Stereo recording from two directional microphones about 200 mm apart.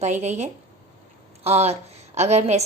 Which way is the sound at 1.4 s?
30° right (ahead or behind).